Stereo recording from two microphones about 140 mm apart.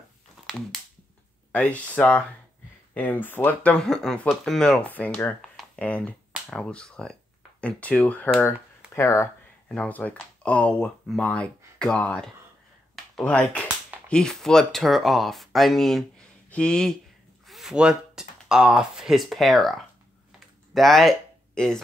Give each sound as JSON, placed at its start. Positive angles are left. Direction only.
{"t": 0.5, "sound": "crushing", "side_deg": 0}
{"t": 1.5, "sound": "speech", "side_deg": 10}
{"t": 12.9, "sound": "a sound", "side_deg": 5}
{"t": 14.0, "sound": "speech", "side_deg": 5}